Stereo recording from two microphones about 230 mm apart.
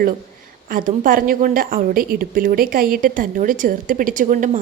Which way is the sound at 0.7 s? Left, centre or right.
Right.